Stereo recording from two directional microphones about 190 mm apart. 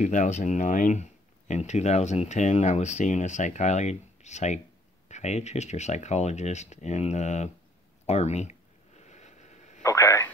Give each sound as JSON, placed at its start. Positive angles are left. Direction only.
{"t": 0.0, "sound": "speech", "side_deg": 40}
{"t": 8.1, "sound": "a sound", "side_deg": 35}
{"t": 9.8, "sound": "radio", "side_deg": 15}